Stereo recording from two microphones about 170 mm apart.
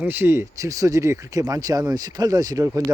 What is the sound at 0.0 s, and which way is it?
Speech, 10° right (ahead or behind).